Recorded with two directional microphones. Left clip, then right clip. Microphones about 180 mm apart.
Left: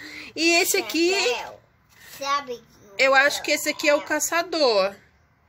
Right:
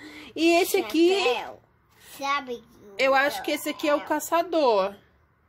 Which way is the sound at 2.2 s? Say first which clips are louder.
Left 2 dB; 55° right (ahead or behind).